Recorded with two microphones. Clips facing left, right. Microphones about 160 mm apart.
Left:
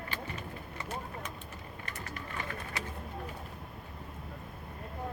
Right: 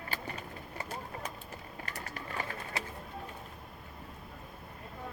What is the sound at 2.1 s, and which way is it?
Bird, 30° right (ahead or behind).